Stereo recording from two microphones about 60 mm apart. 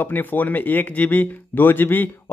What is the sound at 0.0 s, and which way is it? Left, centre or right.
Speech, left.